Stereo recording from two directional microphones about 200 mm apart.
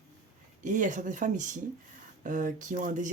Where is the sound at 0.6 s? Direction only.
40° right (ahead or behind).